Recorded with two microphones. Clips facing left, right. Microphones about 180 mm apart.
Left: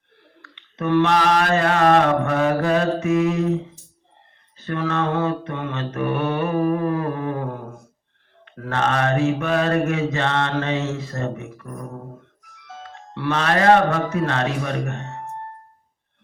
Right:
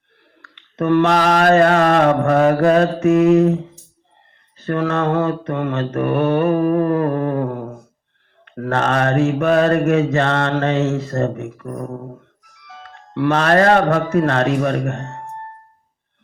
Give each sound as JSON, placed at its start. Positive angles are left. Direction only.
{"t": 0.4, "sound": "mantra", "side_deg": -50}
{"t": 4.6, "sound": "mantra", "side_deg": -50}
{"t": 8.5, "sound": "mantra", "side_deg": -50}
{"t": 13.1, "sound": "mantra", "side_deg": -45}